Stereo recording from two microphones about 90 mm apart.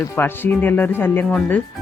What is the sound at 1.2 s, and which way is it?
Speech, 10° left (ahead or behind).